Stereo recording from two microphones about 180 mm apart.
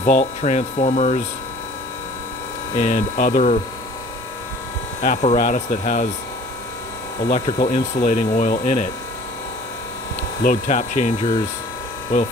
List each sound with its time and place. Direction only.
0.0 s speech: 40° left (ahead or behind)
2.7 s speech: 45° left (ahead or behind)
5.0 s speech: 50° left (ahead or behind)
7.3 s speech: 40° left (ahead or behind)
10.4 s speech: 45° left (ahead or behind)